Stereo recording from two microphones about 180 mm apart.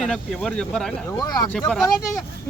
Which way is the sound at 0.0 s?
Centre (ahead or behind).